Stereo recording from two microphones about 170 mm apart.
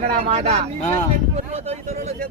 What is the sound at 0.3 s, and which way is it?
Speech, 35° right (ahead or behind).